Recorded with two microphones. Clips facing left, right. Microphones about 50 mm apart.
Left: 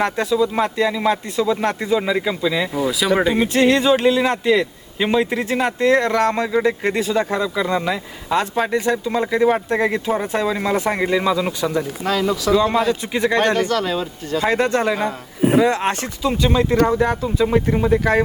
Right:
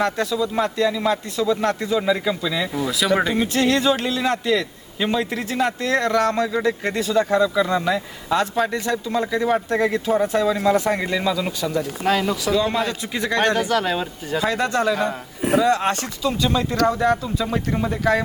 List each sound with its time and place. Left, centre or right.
0.0 s speech: left
12.0 s speech: centre
12.9 s speech: left
13.6 s speech: centre
14.4 s speech: left